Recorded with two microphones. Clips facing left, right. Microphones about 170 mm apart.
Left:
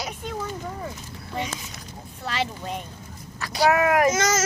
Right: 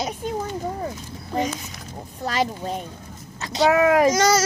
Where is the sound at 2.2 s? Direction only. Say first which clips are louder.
Right 5 dB; 40° right (ahead or behind).